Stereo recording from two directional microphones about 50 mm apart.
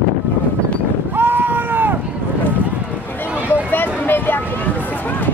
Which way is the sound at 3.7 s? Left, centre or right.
Left.